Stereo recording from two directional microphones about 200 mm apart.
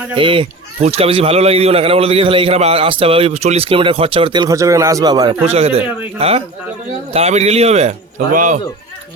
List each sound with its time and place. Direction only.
0.2 s speech: 25° right (ahead or behind)
5.5 s a man's voice: 30° right (ahead or behind)